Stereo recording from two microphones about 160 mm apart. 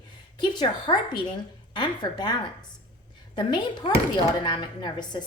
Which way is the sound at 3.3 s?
30° left (ahead or behind).